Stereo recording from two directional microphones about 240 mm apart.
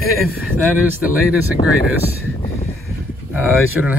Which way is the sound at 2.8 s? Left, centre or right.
Centre.